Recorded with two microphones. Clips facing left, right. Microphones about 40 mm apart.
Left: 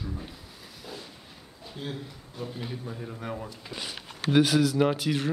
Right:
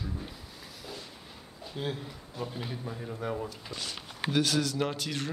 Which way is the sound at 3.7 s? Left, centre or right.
Centre.